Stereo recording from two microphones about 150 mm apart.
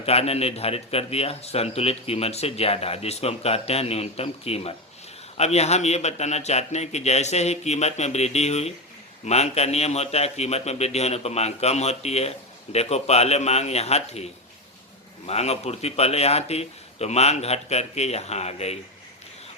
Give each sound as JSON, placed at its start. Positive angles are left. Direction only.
{"t": 0.0, "sound": "speech", "side_deg": 40}
{"t": 15.3, "sound": "speech", "side_deg": 45}